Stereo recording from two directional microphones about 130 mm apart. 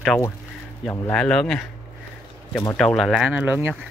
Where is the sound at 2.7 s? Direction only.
Centre (ahead or behind).